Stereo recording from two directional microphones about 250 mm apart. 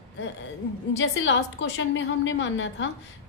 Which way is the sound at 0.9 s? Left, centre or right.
Left.